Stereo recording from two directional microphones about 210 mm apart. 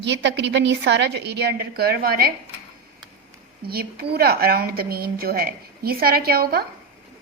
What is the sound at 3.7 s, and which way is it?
A woman's voice, 45° right (ahead or behind).